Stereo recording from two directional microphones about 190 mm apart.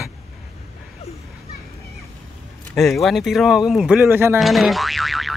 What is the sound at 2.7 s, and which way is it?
Speech, centre (ahead or behind).